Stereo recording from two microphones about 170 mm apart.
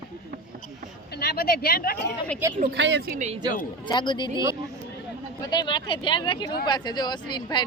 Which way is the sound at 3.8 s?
25° left (ahead or behind).